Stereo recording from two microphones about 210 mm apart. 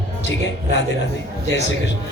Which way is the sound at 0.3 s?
60° left (ahead or behind).